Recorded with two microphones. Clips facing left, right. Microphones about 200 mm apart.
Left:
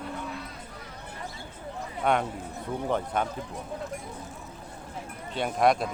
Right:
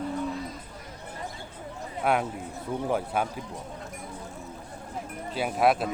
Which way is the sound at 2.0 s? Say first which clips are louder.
Even; 5° right (ahead or behind).